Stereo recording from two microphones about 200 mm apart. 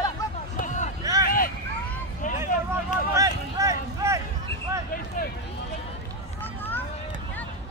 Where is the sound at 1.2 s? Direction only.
45° left (ahead or behind).